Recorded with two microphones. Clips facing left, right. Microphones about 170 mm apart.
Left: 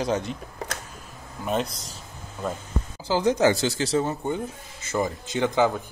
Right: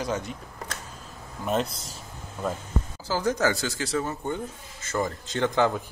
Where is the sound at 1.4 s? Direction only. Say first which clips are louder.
Even; centre (ahead or behind).